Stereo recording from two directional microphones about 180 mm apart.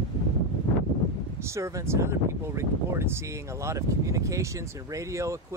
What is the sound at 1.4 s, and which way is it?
Speech, 15° right (ahead or behind).